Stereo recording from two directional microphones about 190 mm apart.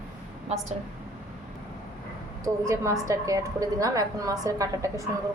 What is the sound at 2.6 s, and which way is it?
A woman's voice, 15° right (ahead or behind).